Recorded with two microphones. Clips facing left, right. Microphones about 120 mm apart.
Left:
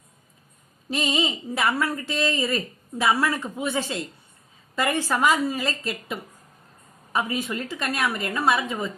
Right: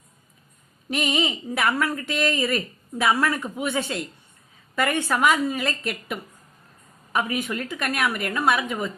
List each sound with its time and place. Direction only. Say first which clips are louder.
0.9 s a woman's voice: right 1 dB; 30° left (ahead or behind)